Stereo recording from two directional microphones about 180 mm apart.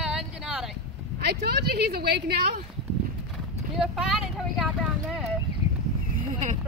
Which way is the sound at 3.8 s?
5° right (ahead or behind).